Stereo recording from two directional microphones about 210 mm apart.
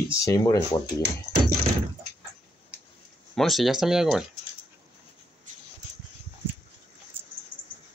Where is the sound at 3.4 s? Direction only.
Centre (ahead or behind).